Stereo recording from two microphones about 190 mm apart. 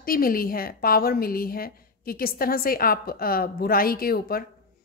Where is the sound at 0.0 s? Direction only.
50° left (ahead or behind).